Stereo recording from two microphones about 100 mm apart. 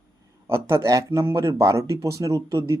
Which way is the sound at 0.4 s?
25° right (ahead or behind).